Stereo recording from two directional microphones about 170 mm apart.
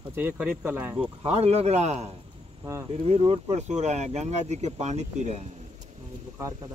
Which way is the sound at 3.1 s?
35° right (ahead or behind).